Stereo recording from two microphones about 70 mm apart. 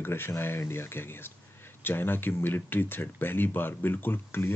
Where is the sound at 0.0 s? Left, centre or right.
Left.